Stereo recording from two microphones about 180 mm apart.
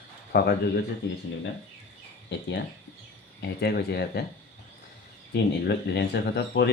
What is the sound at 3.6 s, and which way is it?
Speech, 65° left (ahead or behind).